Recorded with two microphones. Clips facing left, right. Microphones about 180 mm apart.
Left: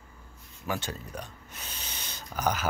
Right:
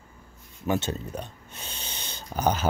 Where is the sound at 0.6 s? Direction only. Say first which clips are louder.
Right 7 dB; 25° right (ahead or behind).